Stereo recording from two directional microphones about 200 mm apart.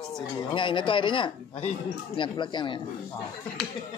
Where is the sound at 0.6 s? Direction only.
25° left (ahead or behind).